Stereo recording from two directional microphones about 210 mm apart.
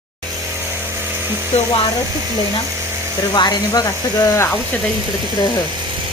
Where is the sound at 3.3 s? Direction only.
20° left (ahead or behind).